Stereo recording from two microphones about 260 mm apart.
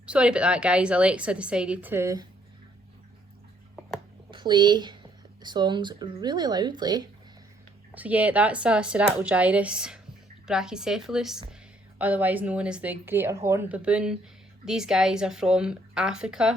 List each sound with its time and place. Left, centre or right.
0.0 s a woman's voice: centre
4.3 s a woman's voice: centre